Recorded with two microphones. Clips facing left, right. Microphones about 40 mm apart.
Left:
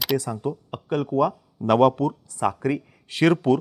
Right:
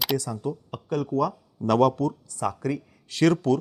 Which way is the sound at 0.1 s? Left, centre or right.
Left.